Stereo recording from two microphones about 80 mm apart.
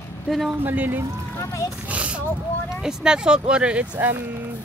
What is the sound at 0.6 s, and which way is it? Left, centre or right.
Speech, right.